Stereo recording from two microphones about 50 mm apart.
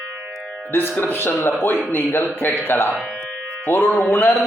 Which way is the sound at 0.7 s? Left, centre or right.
Left.